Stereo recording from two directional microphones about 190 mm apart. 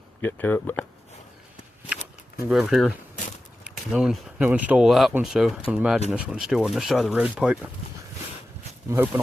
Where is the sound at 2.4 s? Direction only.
Centre (ahead or behind).